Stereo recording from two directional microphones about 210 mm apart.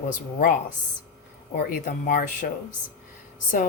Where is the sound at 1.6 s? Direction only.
40° left (ahead or behind).